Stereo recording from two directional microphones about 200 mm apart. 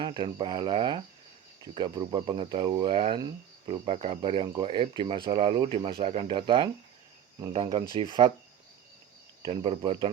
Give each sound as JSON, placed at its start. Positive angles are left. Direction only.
{"t": 0.0, "sound": "speech", "side_deg": -20}
{"t": 9.4, "sound": "speech", "side_deg": -25}